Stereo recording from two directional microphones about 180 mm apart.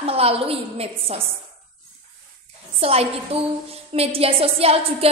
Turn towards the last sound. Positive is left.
turn(degrees=-35)  # may be behind; listen again after turning